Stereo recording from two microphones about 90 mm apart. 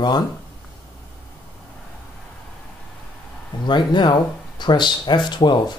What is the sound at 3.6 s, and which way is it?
Speech, 60° left (ahead or behind).